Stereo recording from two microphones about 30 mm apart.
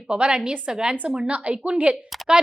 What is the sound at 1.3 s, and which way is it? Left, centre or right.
Speech, right.